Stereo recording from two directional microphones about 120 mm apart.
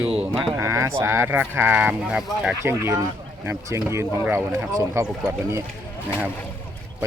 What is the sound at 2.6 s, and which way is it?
Speech, 20° right (ahead or behind).